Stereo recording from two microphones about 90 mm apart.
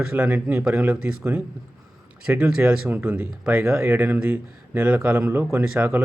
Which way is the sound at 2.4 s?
15° right (ahead or behind).